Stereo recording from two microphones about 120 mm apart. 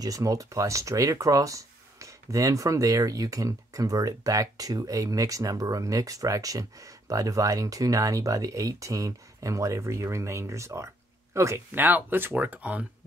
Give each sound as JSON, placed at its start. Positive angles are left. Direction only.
{"t": 0.0, "sound": "speech", "side_deg": -30}